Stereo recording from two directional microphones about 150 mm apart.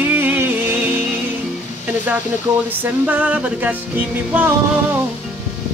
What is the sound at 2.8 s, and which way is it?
Music, 10° right (ahead or behind).